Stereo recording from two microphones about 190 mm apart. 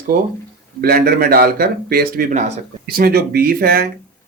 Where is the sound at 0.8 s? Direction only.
50° right (ahead or behind).